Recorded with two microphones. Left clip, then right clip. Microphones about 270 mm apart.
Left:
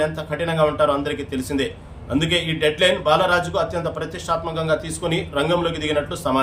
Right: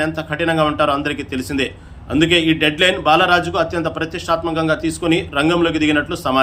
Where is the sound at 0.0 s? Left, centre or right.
Centre.